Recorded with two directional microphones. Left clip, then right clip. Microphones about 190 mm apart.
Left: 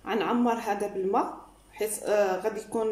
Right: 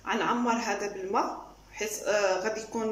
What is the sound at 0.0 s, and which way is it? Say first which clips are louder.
A woman's voice: left 1 dB; 20° left (ahead or behind).